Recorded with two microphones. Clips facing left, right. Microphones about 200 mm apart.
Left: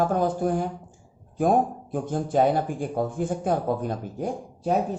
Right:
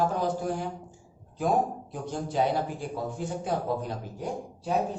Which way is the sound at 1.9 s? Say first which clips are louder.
Left 7 dB; 50° left (ahead or behind).